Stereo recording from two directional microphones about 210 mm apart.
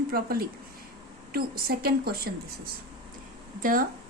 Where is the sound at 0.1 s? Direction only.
45° right (ahead or behind).